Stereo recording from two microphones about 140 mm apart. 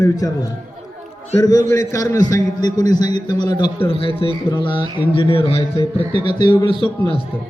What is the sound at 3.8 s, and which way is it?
A man's voice, 40° left (ahead or behind).